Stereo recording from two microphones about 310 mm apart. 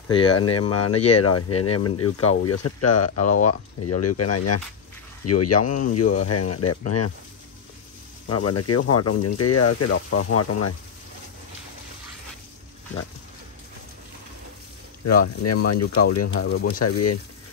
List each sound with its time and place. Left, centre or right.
0.1 s speech: centre
0.4 s speech: left
8.3 s speech: left
15.0 s speech: left
16.4 s speech: left
16.8 s speech: left